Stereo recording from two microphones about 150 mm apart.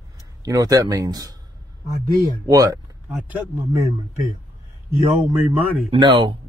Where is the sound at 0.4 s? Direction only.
25° right (ahead or behind).